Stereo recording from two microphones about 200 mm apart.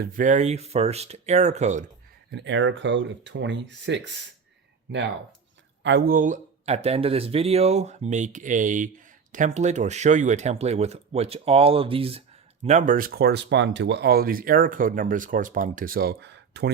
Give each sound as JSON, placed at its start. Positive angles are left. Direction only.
{"t": 0.0, "sound": "speech", "side_deg": -40}
{"t": 2.3, "sound": "speech", "side_deg": -65}
{"t": 12.6, "sound": "speech", "side_deg": -40}